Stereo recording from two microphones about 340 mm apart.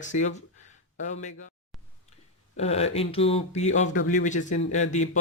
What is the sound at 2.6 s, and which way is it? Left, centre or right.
Speech, centre.